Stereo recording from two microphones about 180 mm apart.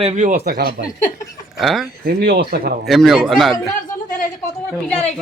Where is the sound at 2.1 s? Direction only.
60° right (ahead or behind).